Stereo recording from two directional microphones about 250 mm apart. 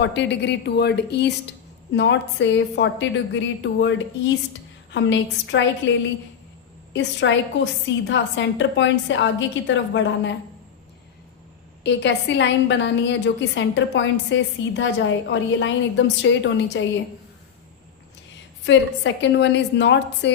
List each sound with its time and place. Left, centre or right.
0.0 s a woman's voice: left
6.9 s a woman's voice: left
11.8 s a woman's voice: left
18.6 s a woman's voice: left